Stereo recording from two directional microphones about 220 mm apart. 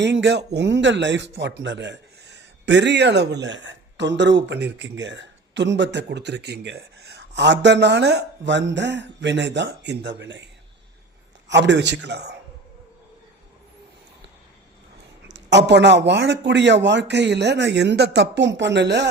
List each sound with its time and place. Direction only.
0.0 s speech: 55° right (ahead or behind)
15.3 s speech: 50° right (ahead or behind)